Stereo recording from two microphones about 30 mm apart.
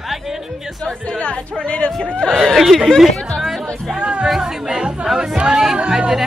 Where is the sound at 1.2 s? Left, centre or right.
Left.